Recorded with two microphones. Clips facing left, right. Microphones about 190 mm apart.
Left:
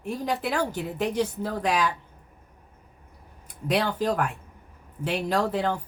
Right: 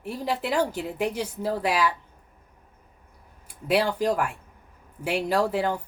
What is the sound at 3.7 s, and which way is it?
Speech, 10° right (ahead or behind).